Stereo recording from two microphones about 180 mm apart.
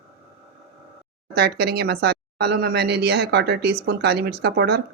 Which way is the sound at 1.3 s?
65° right (ahead or behind).